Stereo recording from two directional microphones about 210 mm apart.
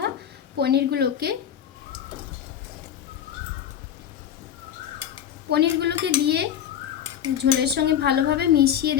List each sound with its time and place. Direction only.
0.6 s a woman's voice: 50° right (ahead or behind)
5.5 s a woman's voice: 50° right (ahead or behind)